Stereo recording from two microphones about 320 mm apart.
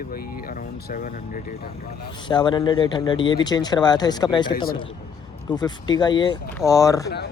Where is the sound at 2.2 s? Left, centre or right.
Centre.